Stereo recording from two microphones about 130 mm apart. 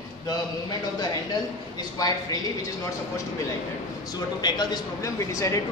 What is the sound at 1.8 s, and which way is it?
Speech, 30° left (ahead or behind).